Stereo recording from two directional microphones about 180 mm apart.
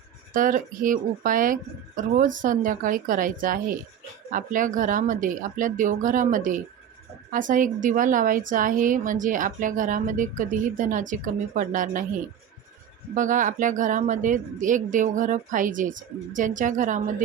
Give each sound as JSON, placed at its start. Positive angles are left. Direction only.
{"t": 0.3, "sound": "a woman's voice", "side_deg": -50}
{"t": 13.1, "sound": "a woman's voice", "side_deg": -45}